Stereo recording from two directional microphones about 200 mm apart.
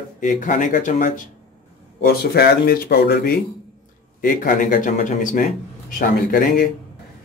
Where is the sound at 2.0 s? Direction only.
55° left (ahead or behind).